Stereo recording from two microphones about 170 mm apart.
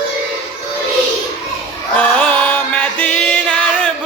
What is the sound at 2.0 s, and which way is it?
Music, 10° left (ahead or behind).